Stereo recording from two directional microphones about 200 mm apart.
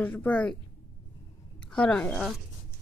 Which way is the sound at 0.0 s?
5° left (ahead or behind).